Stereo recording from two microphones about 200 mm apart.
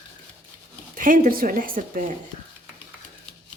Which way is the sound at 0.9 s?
45° right (ahead or behind).